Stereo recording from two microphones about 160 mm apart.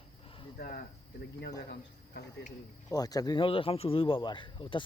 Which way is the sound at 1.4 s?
90° left.